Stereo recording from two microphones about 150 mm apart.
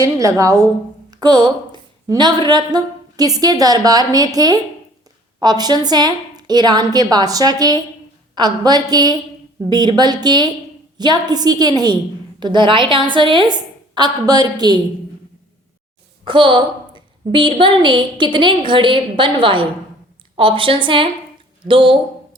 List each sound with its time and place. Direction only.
0.0 s a woman's voice: 20° right (ahead or behind)
16.2 s a woman's voice: 35° right (ahead or behind)